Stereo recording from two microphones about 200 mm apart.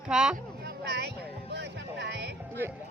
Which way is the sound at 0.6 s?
55° right (ahead or behind).